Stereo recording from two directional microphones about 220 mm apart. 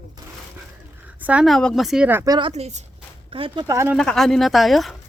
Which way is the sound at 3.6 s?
10° right (ahead or behind).